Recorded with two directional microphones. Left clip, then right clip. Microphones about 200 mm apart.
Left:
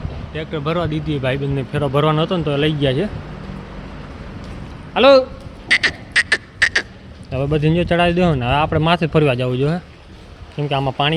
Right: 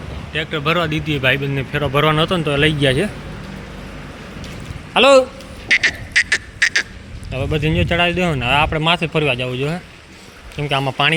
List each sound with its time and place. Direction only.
0.3 s speech: 5° left (ahead or behind)
4.9 s a man's voice: 15° right (ahead or behind)
5.8 s beatboxing: 20° left (ahead or behind)
7.3 s speech: 30° left (ahead or behind)
10.6 s speech: 15° left (ahead or behind)